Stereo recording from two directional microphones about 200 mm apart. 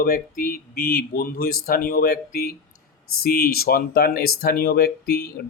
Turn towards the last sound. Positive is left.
turn(degrees=50)  # may be behind; listen again after turning